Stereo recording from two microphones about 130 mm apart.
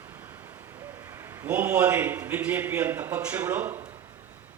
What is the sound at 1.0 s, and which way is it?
A man's voice, 20° right (ahead or behind).